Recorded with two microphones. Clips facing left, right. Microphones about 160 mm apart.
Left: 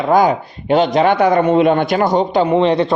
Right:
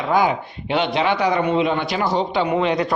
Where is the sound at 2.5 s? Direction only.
30° left (ahead or behind).